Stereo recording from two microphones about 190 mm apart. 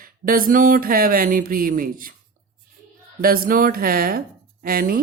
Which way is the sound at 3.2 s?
50° right (ahead or behind).